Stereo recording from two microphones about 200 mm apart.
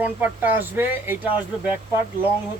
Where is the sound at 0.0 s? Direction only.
10° right (ahead or behind).